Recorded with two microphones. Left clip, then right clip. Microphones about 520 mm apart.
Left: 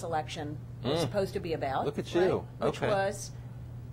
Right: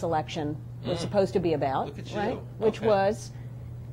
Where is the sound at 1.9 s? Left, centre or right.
Left.